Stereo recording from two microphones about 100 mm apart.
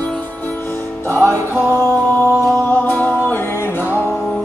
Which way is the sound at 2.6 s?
15° left (ahead or behind).